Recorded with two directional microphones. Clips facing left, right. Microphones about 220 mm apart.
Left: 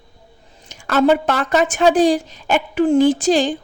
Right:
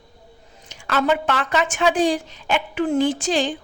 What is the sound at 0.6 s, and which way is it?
A woman's voice, 45° left (ahead or behind).